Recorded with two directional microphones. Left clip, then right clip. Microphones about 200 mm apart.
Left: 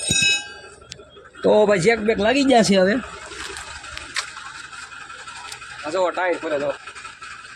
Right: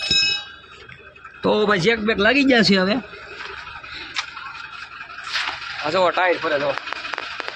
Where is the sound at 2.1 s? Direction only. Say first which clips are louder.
Right 2 dB; 20° right (ahead or behind).